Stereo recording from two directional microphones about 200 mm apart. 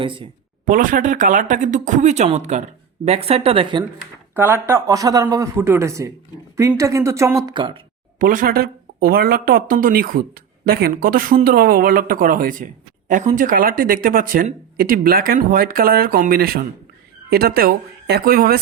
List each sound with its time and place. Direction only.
0.0 s speech: 25° right (ahead or behind)
0.6 s speech: 40° right (ahead or behind); by 3.8 s 25° right (ahead or behind)
4.4 s speech: 10° right (ahead or behind)
8.2 s speech: 45° right (ahead or behind)